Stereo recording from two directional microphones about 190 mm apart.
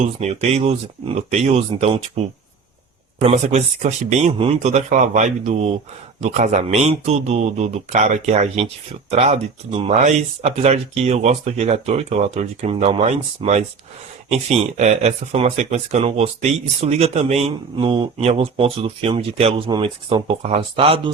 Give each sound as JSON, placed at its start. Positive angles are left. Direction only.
{"t": 0.0, "sound": "speech", "side_deg": -35}